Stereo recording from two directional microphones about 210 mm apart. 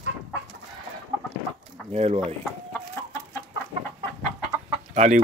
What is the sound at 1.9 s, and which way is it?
Speech, 30° right (ahead or behind).